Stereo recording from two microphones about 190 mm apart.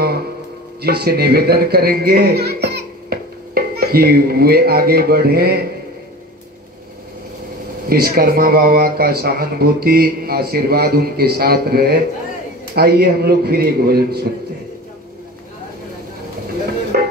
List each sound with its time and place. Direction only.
0.8 s speech: 55° right (ahead or behind)
7.9 s a man's voice: 50° right (ahead or behind)